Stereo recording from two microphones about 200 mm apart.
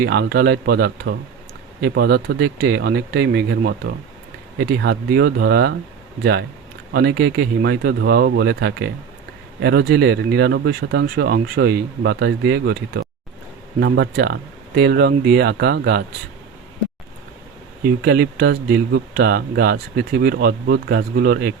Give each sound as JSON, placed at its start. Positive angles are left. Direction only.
{"t": 0.0, "sound": "speech", "side_deg": -55}
{"t": 6.9, "sound": "speech", "side_deg": -60}
{"t": 18.0, "sound": "speech", "side_deg": -50}